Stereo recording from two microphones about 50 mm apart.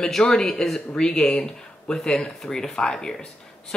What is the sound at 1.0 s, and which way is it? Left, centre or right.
Speech, centre.